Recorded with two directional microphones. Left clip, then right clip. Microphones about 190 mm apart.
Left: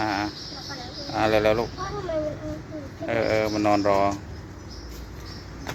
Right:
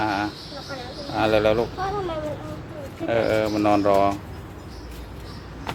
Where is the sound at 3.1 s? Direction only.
10° right (ahead or behind).